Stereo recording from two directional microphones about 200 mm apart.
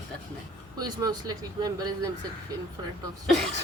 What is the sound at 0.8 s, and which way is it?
Speech, 20° right (ahead or behind).